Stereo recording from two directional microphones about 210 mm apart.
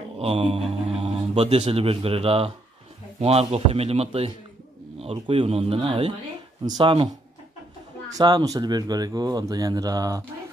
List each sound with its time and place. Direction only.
0.2 s a man's voice: 30° right (ahead or behind)
8.1 s speech: 20° right (ahead or behind)